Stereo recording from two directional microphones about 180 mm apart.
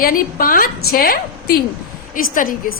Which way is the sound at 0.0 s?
50° left (ahead or behind).